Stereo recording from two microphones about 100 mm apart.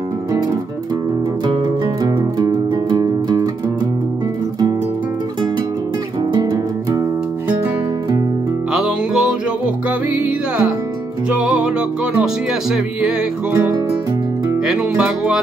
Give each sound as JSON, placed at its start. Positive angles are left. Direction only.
{"t": 2.0, "sound": "music", "side_deg": -40}
{"t": 6.3, "sound": "music", "side_deg": -40}
{"t": 8.7, "sound": "music", "side_deg": -5}
{"t": 14.7, "sound": "music", "side_deg": -5}